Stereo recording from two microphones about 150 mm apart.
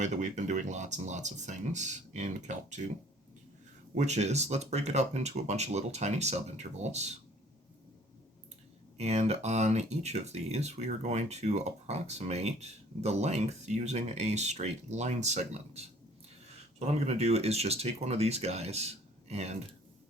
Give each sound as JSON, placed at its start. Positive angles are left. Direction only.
{"t": 0.0, "sound": "speech", "side_deg": -55}
{"t": 3.9, "sound": "speech", "side_deg": -50}
{"t": 9.0, "sound": "speech", "side_deg": -45}